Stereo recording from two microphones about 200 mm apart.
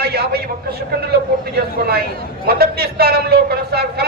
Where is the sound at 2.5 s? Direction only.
50° right (ahead or behind).